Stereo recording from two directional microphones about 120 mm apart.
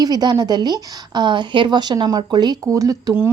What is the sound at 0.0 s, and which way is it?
A woman's voice, 35° right (ahead or behind).